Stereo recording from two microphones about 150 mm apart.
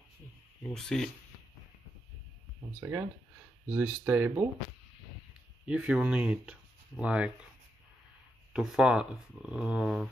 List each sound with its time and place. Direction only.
0.7 s speech: centre (ahead or behind)
2.8 s speech: 15° right (ahead or behind)
5.7 s speech: 5° right (ahead or behind)
8.5 s speech: 5° right (ahead or behind)